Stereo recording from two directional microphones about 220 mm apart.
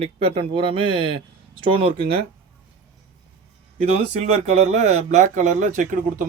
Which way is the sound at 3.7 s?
30° right (ahead or behind).